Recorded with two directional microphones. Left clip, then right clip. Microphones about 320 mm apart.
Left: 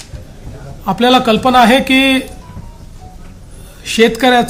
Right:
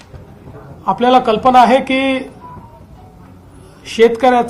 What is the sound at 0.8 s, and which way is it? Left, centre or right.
A man's voice, left.